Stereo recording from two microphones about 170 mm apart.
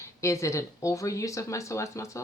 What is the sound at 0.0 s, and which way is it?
Speech, 15° left (ahead or behind).